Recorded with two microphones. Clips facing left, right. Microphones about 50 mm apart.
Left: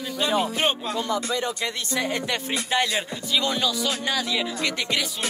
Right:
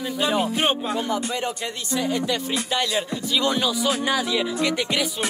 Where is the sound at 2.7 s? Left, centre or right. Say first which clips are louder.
Left 1 dB; left.